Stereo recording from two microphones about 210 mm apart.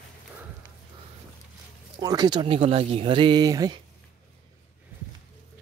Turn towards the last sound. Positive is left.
turn(degrees=-20)  # may be behind; listen again after turning